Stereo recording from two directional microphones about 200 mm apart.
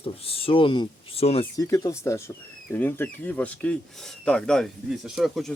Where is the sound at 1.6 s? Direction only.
15° left (ahead or behind); by 5.5 s centre (ahead or behind).